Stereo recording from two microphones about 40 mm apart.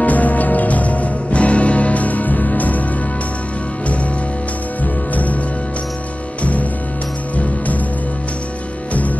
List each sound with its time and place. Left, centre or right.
0.0 s music: left
5.1 s music: left